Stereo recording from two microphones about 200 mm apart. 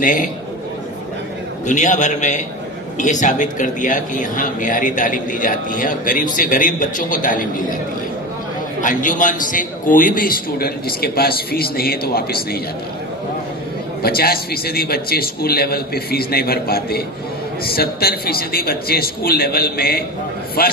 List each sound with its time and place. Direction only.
0.0 s a man's voice: 40° left (ahead or behind)
1.6 s a man's voice: 40° left (ahead or behind)
8.8 s a man's voice: 40° left (ahead or behind)
14.0 s a man's voice: 50° left (ahead or behind)